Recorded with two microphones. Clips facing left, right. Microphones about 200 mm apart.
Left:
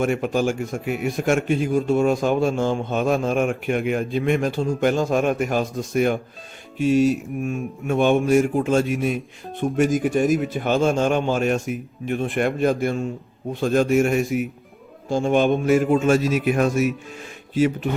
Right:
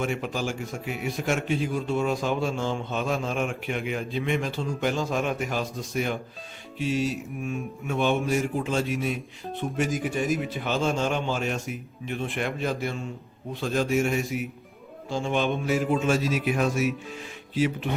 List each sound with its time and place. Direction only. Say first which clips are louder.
0.0 s a man's voice: left 8 dB; 50° left (ahead or behind)